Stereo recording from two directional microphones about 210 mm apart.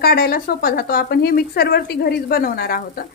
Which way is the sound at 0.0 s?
50° left (ahead or behind).